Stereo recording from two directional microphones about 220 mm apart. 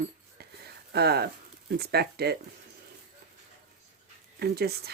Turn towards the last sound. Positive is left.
turn(degrees=-45)  # may be behind; listen again after turning